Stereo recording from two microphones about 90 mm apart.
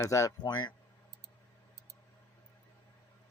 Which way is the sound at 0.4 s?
55° left (ahead or behind).